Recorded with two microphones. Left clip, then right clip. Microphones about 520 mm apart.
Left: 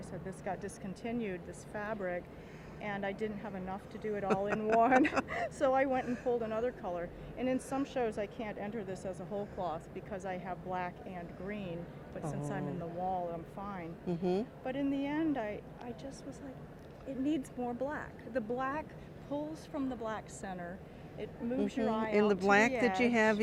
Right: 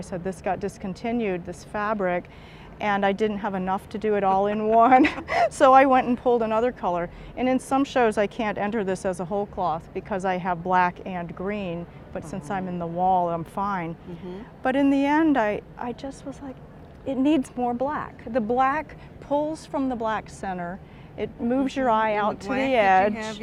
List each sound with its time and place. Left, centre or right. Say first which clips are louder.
0.0 s a woman's voice: right 13 dB; right
2.7 s a woman's voice: right 16 dB; right
13.1 s a woman's voice: right 16 dB; right
22.4 s speech: right 1 dB; left
22.7 s speech: right 14 dB; right
23.0 s speech: right 3 dB; left